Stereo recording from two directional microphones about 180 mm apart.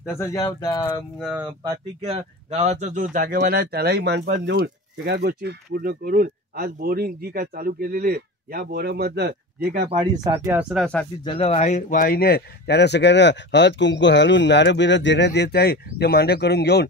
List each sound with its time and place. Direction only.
0.2 s speech: 15° left (ahead or behind)
1.2 s speech: 5° right (ahead or behind)
2.0 s speech: 35° right (ahead or behind)
3.3 s speech: 60° right (ahead or behind)
9.8 s speech: 30° right (ahead or behind)
10.3 s speech: 15° right (ahead or behind)
11.2 s a man's voice: 30° left (ahead or behind); by 16.8 s 65° left (ahead or behind)